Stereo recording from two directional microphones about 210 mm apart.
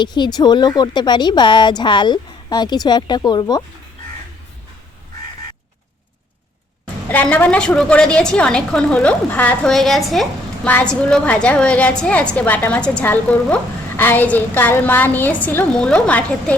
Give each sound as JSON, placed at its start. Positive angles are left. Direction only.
{"t": 0.0, "sound": "a woman's voice", "side_deg": 20}
{"t": 7.1, "sound": "a woman's voice", "side_deg": 10}